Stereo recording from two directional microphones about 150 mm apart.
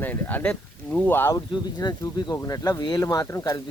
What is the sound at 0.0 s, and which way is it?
Speech, 10° left (ahead or behind).